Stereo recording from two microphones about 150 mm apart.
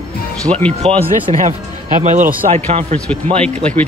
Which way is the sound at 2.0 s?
55° right (ahead or behind).